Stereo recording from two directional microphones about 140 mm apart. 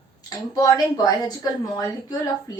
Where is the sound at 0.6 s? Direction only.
25° left (ahead or behind).